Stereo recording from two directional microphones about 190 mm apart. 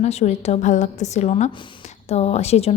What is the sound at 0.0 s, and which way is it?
Speech, 35° left (ahead or behind).